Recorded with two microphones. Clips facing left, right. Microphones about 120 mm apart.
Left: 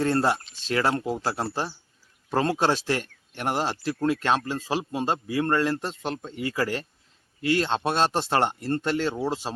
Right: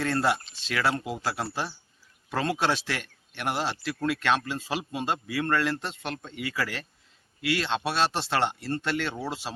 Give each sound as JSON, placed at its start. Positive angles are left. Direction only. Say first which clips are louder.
{"t": 0.0, "sound": "speech", "louder": "left 3 dB", "side_deg": 35}